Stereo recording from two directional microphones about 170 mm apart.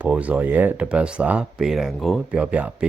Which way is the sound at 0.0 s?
10° right (ahead or behind).